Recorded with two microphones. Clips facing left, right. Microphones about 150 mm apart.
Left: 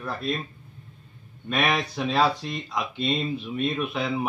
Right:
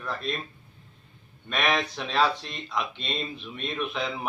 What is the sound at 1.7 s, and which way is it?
A man's voice, 5° left (ahead or behind).